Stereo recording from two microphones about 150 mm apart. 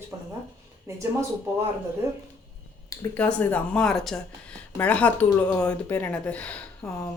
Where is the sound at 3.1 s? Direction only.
10° left (ahead or behind).